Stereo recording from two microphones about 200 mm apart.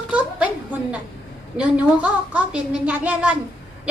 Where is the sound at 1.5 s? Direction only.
5° right (ahead or behind).